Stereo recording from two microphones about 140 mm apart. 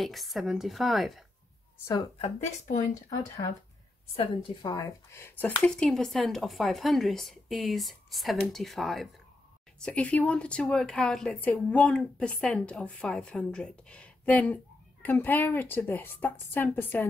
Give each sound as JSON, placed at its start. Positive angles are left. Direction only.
{"t": 0.0, "sound": "speech", "side_deg": 0}
{"t": 2.4, "sound": "speech", "side_deg": 55}
{"t": 4.2, "sound": "a woman's voice", "side_deg": 35}